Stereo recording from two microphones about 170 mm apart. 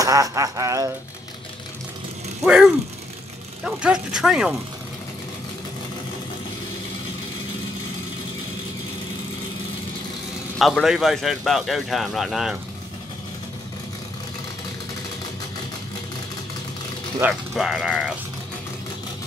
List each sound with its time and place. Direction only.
0.0 s a sound: 20° right (ahead or behind)
2.4 s speech: 5° right (ahead or behind)
10.6 s speech: centre (ahead or behind)
17.2 s speech: centre (ahead or behind)